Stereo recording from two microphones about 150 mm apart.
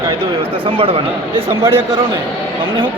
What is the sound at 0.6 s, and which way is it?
Speech, 35° right (ahead or behind).